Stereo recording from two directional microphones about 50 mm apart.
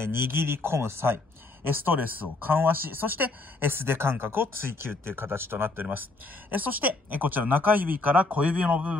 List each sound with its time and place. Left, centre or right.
0.0 s speech: right
1.7 s speech: right
6.5 s speech: right